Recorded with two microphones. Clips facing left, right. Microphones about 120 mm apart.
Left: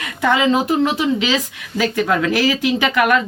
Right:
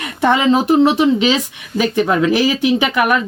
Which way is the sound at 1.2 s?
20° right (ahead or behind).